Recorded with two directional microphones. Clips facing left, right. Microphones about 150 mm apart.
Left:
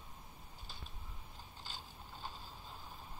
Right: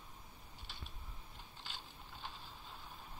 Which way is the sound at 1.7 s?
40° left (ahead or behind).